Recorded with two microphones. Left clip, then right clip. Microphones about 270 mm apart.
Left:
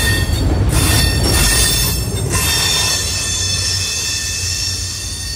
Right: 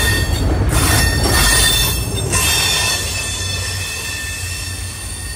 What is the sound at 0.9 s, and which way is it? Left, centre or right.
Train wheels squealing, centre.